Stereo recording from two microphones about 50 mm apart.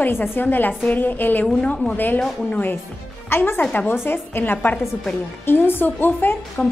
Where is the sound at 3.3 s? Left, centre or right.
Left.